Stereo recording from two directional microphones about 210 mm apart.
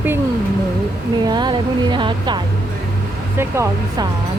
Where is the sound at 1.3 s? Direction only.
20° right (ahead or behind).